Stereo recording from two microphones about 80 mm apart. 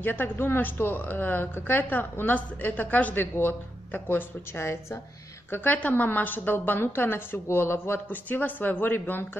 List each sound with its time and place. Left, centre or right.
0.0 s a woman's voice: left